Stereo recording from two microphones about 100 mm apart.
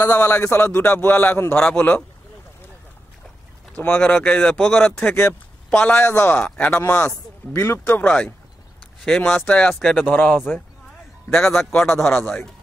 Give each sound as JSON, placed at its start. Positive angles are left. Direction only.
{"t": 0.0, "sound": "a man's voice", "side_deg": 20}
{"t": 3.7, "sound": "a man's voice", "side_deg": 15}
{"t": 5.7, "sound": "a man's voice", "side_deg": 10}
{"t": 12.2, "sound": "a man's voice", "side_deg": 20}